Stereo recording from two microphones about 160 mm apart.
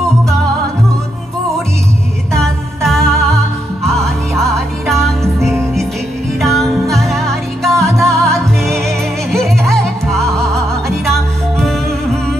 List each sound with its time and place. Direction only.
2.3 s music: centre (ahead or behind)